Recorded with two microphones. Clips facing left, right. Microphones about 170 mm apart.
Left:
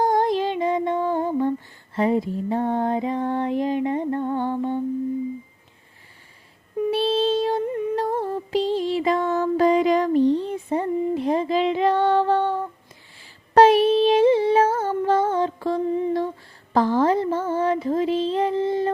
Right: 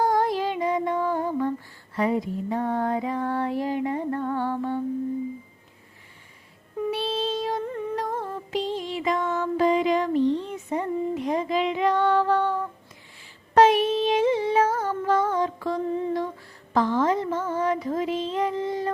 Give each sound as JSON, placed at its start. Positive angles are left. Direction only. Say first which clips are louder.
{"t": 0.0, "sound": "music", "louder": "left 3 dB", "side_deg": 20}
{"t": 2.0, "sound": "a sound", "louder": "left 3 dB", "side_deg": 25}
{"t": 6.9, "sound": "female singing", "louder": "left 8 dB", "side_deg": 30}
{"t": 7.9, "sound": "music", "louder": "left 5 dB", "side_deg": 30}
{"t": 13.5, "sound": "a sound", "louder": "left 4 dB", "side_deg": 35}
{"t": 16.7, "sound": "music", "louder": "left 3 dB", "side_deg": 35}